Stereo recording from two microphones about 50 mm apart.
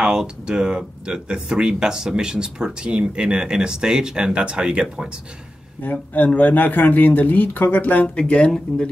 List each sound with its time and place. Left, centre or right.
0.0 s speech: centre
5.8 s speech: left
8.2 s speech: left